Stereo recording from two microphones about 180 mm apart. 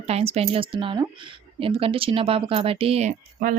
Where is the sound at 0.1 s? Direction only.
35° right (ahead or behind).